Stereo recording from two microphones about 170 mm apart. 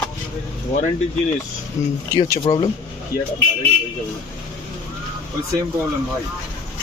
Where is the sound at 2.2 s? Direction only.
25° left (ahead or behind).